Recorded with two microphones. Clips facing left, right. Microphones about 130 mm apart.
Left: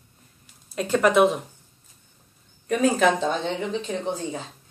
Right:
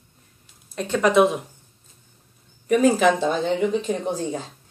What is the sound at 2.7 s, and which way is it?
Speech, 5° right (ahead or behind).